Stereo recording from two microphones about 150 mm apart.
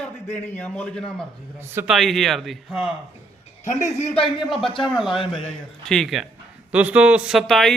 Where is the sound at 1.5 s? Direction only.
15° right (ahead or behind).